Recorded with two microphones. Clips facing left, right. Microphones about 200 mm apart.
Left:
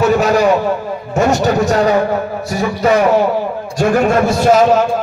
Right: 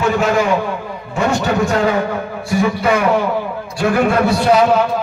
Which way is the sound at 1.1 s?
40° left (ahead or behind).